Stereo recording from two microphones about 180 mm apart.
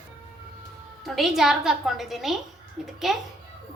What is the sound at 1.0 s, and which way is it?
A woman's voice, centre (ahead or behind).